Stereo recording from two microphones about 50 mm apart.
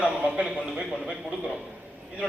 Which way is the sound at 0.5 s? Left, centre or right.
Centre.